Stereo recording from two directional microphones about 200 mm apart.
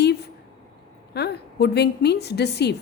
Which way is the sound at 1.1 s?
55° left (ahead or behind).